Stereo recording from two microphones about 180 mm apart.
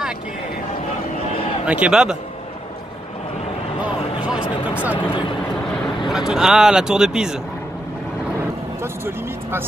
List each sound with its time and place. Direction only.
1.7 s speech: 5° right (ahead or behind)
3.8 s a sound: 5° right (ahead or behind)
5.0 s speech: 25° left (ahead or behind)
6.0 s speech: centre (ahead or behind)
9.0 s speech: 15° right (ahead or behind)